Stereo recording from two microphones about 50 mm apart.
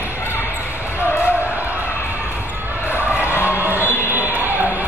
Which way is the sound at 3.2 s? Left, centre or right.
Left.